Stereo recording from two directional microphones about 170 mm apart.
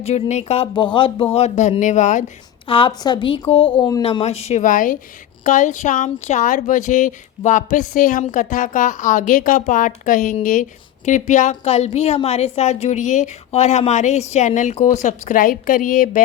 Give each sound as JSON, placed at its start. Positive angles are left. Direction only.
{"t": 0.0, "sound": "a woman's voice", "side_deg": 40}
{"t": 2.6, "sound": "a woman's voice", "side_deg": 30}
{"t": 4.0, "sound": "a woman's voice", "side_deg": 35}